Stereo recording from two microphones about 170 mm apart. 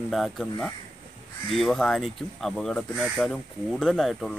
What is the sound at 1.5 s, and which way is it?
Speech, centre (ahead or behind).